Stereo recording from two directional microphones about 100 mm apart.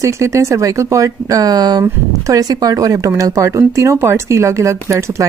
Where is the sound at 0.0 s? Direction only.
30° right (ahead or behind).